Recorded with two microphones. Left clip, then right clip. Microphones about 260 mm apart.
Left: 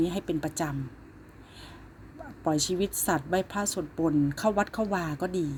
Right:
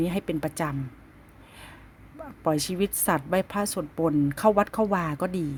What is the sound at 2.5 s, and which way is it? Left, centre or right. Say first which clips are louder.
Speech: left 1 dB; right.